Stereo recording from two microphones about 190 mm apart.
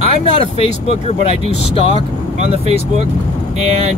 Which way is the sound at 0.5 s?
30° left (ahead or behind).